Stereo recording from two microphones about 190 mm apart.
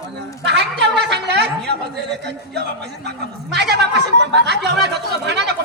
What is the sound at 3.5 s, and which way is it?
Chatter, 60° right (ahead or behind).